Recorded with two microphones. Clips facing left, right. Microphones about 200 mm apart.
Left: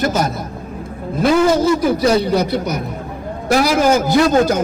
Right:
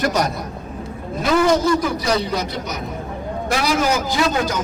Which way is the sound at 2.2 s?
60° left (ahead or behind).